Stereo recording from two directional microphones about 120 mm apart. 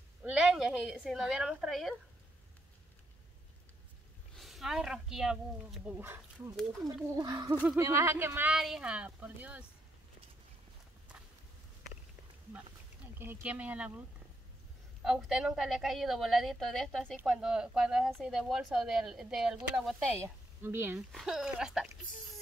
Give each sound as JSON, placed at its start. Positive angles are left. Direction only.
{"t": 0.2, "sound": "a woman's voice", "side_deg": -10}
{"t": 4.4, "sound": "a woman's voice", "side_deg": 0}
{"t": 5.9, "sound": "speech", "side_deg": -20}
{"t": 6.5, "sound": "a woman's voice", "side_deg": 0}
{"t": 7.2, "sound": "speech", "side_deg": -30}
{"t": 8.5, "sound": "speech", "side_deg": -5}
{"t": 13.2, "sound": "speech", "side_deg": -15}
{"t": 15.0, "sound": "a woman's voice", "side_deg": -5}
{"t": 20.2, "sound": "speech", "side_deg": -20}
{"t": 21.1, "sound": "a woman's voice", "side_deg": 0}